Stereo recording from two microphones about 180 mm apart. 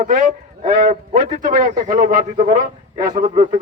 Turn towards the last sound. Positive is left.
turn(degrees=-40)  # may be behind; listen again after turning